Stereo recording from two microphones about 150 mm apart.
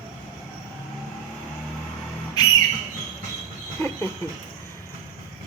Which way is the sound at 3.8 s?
20° left (ahead or behind).